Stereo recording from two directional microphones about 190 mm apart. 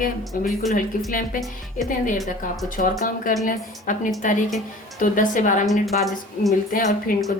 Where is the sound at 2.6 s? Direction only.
45° left (ahead or behind).